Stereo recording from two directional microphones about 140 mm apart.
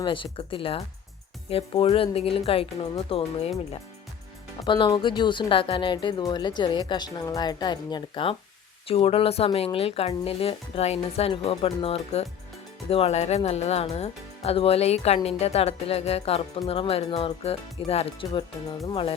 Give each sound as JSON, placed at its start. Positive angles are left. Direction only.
{"t": 0.0, "sound": "speech", "side_deg": 35}
{"t": 4.6, "sound": "speech", "side_deg": 35}